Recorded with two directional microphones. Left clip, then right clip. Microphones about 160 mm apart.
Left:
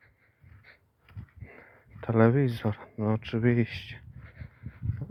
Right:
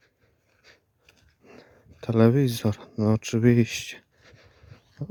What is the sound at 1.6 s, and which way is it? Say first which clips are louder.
Speech: right 2 dB; 85° right.